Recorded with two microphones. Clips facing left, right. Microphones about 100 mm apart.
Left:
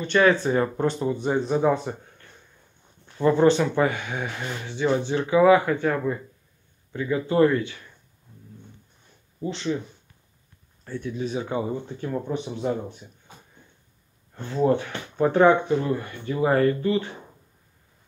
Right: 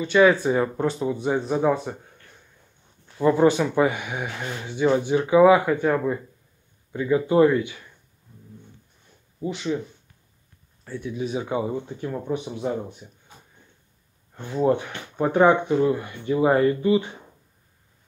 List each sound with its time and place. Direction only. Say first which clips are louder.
0.0 s speech: right 2 dB; 5° right (ahead or behind)
3.2 s speech: even; 5° right (ahead or behind)
9.4 s speech: right 1 dB; 10° right (ahead or behind)
10.8 s speech: even; 10° right (ahead or behind)
14.3 s speech: even; 10° right (ahead or behind)